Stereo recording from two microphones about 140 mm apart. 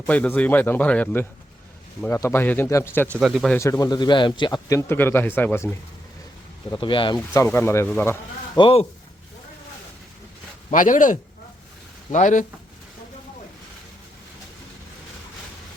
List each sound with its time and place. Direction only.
0.0 s a man's voice: 10° left (ahead or behind)
3.2 s speech: centre (ahead or behind)
3.6 s a man's voice: 25° left (ahead or behind)
6.7 s speech: 35° left (ahead or behind)
7.3 s a man's voice: 15° left (ahead or behind)
8.5 s speech: 40° left (ahead or behind)
10.7 s speech: 65° left (ahead or behind)